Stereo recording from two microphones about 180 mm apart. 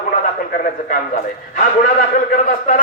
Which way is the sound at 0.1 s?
45° left (ahead or behind).